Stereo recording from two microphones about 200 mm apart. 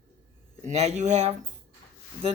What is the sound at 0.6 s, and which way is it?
Speech, 35° right (ahead or behind).